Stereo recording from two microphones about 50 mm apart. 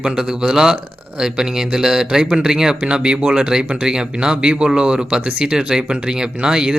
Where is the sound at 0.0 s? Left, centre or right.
Centre.